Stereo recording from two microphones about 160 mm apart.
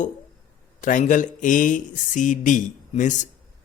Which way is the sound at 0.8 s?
55° left (ahead or behind).